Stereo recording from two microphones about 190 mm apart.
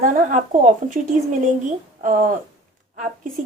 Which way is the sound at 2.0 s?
45° right (ahead or behind).